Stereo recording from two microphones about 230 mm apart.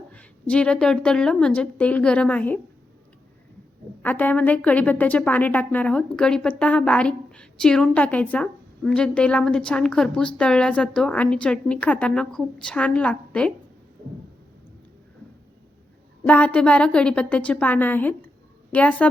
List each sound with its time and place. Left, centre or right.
0.1 s a woman's voice: centre
4.0 s a woman's voice: centre
14.0 s a sound: right
16.2 s a woman's voice: centre